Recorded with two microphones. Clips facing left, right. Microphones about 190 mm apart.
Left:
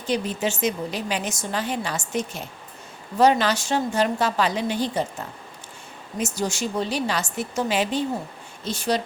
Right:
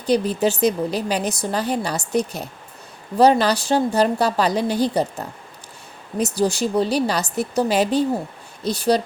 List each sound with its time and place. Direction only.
0.0 s a woman's voice: 35° right (ahead or behind)